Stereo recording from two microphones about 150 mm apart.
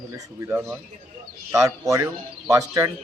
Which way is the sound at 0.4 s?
15° right (ahead or behind).